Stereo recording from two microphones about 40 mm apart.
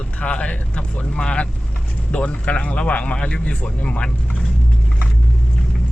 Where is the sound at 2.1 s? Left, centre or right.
Left.